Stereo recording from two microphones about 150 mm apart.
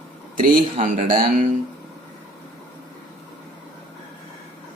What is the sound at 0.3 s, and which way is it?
Speech, 65° right (ahead or behind).